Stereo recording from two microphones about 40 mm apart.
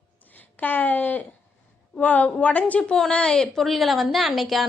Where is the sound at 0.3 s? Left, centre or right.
Left.